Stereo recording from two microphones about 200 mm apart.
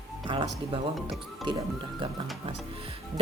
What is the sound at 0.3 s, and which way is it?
A woman's voice, 25° right (ahead or behind).